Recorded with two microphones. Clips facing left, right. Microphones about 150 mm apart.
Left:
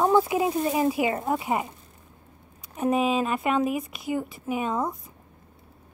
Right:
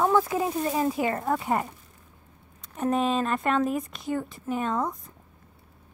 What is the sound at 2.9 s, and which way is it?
A woman's voice, 5° left (ahead or behind).